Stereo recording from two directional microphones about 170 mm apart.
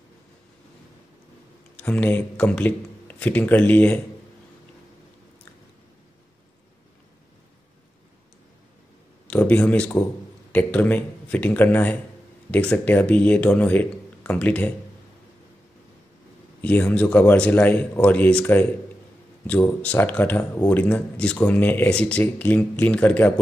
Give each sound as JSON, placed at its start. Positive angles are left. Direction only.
{"t": 1.8, "sound": "speech", "side_deg": 10}
{"t": 9.3, "sound": "speech", "side_deg": 10}
{"t": 16.6, "sound": "speech", "side_deg": 10}